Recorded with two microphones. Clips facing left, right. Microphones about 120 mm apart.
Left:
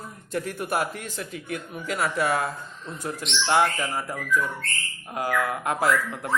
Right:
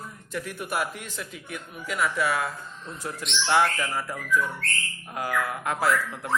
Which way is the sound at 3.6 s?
15° left (ahead or behind).